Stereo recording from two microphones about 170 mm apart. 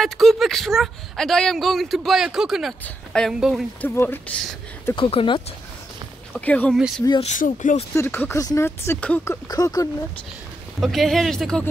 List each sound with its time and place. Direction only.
0.0 s a woman's voice: centre (ahead or behind)
3.8 s speech: 10° left (ahead or behind)
4.9 s speech: 30° left (ahead or behind)
6.4 s speech: 10° left (ahead or behind)
7.1 s speech: 35° left (ahead or behind)
7.3 s speech: 50° left (ahead or behind)
7.9 s speech: 15° left (ahead or behind)
10.8 s a woman's voice: centre (ahead or behind)